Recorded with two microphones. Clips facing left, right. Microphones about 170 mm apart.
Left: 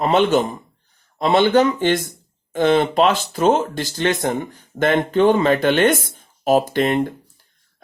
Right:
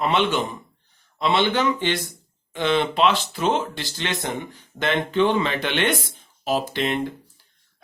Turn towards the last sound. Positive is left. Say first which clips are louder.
# left 6 dB
turn(degrees=50)  # may be behind; listen again after turning